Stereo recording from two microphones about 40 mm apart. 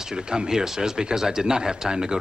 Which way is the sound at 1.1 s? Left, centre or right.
Centre.